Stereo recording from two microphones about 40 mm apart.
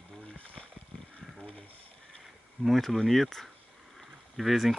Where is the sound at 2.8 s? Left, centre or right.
Centre.